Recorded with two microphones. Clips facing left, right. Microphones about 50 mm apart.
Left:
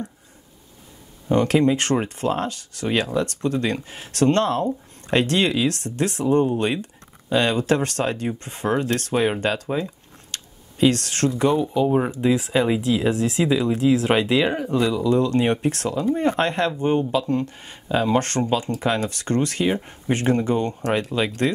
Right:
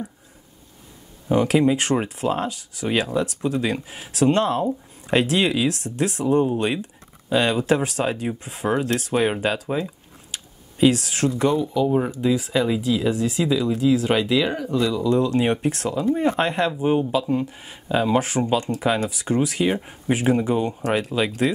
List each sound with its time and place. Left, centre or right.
1.3 s speech: centre
11.5 s speech: left
15.0 s speech: centre